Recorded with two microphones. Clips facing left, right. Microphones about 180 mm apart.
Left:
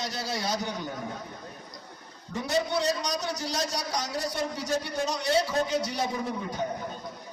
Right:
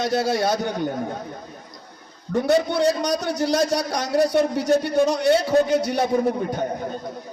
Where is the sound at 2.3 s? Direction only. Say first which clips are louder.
Right 8 dB; 60° right (ahead or behind).